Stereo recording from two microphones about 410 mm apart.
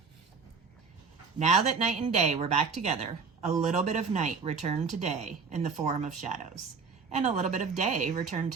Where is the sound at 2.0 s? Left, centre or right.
Centre.